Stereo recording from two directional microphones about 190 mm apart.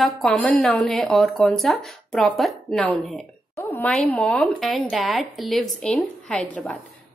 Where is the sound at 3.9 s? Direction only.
10° left (ahead or behind).